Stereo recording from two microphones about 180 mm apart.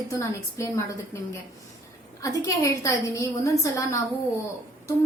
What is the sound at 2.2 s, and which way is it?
A woman's voice, 20° left (ahead or behind).